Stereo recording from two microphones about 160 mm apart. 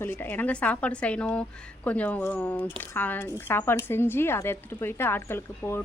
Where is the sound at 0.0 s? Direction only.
15° left (ahead or behind).